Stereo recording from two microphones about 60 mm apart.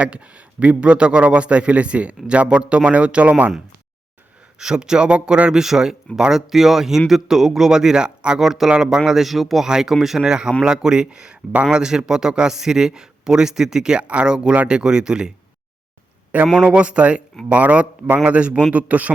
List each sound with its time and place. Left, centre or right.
0.0 s a man's voice: right
4.6 s a man's voice: centre
16.3 s a man's voice: right